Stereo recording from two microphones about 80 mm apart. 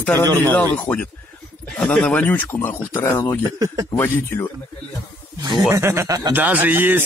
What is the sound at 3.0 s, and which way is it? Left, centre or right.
Speech, left.